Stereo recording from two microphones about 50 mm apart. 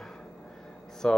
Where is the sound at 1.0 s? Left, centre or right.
Centre.